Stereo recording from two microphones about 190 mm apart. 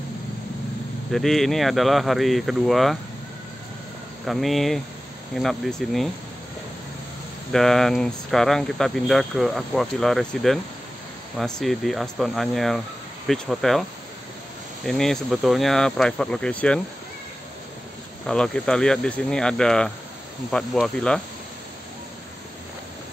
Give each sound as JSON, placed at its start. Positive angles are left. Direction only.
{"t": 1.1, "sound": "speech", "side_deg": 0}
{"t": 4.3, "sound": "speech", "side_deg": 0}
{"t": 7.5, "sound": "speech", "side_deg": 0}
{"t": 14.9, "sound": "speech", "side_deg": 0}
{"t": 18.2, "sound": "speech", "side_deg": 5}